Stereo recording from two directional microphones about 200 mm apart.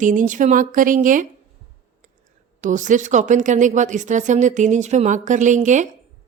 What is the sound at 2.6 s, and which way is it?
Speech, 40° right (ahead or behind).